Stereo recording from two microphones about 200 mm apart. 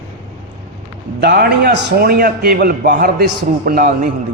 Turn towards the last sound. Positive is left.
turn(degrees=-45)  # may be behind; listen again after turning